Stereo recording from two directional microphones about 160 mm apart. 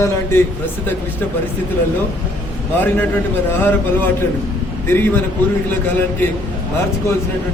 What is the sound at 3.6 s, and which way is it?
Speech, 10° left (ahead or behind).